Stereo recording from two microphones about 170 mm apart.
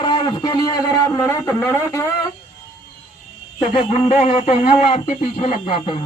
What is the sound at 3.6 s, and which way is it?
A man's voice, 35° left (ahead or behind).